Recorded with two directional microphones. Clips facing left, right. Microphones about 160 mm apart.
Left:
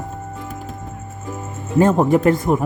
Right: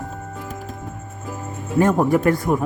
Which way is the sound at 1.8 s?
25° left (ahead or behind).